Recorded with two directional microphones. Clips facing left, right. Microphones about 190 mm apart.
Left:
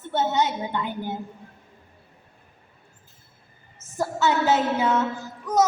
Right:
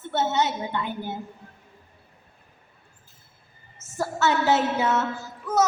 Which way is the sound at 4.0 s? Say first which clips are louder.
Left 1 dB; 15° left (ahead or behind).